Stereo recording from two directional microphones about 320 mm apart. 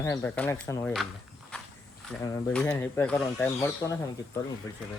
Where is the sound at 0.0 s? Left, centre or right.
Centre.